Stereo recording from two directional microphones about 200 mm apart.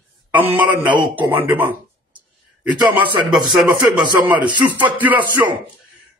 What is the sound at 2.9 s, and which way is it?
Speech, 5° right (ahead or behind).